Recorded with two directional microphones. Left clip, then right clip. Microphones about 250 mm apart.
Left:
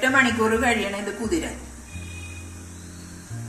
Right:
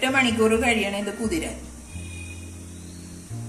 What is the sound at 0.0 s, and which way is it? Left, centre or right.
Speech, right.